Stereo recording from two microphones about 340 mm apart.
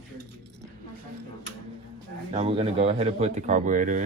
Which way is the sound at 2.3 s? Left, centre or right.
Centre.